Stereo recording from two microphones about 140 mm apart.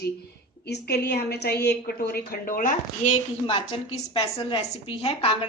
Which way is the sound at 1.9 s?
90° left.